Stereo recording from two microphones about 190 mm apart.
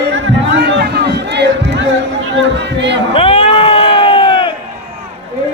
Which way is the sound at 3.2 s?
30° left (ahead or behind).